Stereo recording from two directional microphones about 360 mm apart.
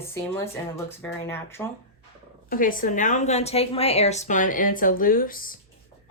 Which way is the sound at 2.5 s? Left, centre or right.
Left.